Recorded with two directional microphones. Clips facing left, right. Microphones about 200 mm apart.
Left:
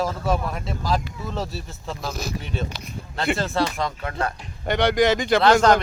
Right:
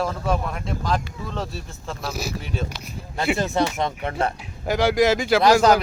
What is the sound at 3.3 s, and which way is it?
Speech, 20° right (ahead or behind).